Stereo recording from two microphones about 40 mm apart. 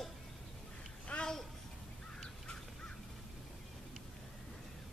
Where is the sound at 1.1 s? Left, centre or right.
Left.